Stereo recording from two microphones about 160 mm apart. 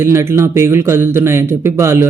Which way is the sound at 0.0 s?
15° right (ahead or behind).